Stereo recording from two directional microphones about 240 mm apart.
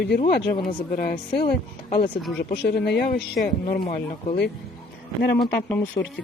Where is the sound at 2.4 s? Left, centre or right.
Left.